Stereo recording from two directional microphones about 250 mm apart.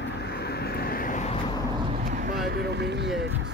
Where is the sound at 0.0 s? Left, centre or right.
Left.